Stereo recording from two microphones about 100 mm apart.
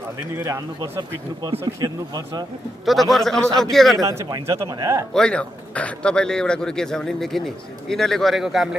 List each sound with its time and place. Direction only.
2.8 s a man's voice: centre (ahead or behind)
4.0 s speech: 30° right (ahead or behind)
5.1 s a man's voice: 10° left (ahead or behind)